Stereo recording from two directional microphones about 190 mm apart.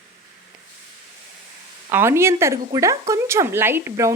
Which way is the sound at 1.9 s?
10° right (ahead or behind).